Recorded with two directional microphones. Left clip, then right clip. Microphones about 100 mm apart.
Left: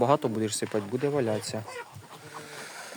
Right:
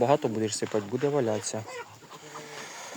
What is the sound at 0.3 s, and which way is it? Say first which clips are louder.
Speech: even; 25° left (ahead or behind).